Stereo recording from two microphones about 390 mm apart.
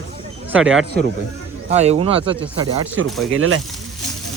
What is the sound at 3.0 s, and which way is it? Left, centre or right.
Speech, right.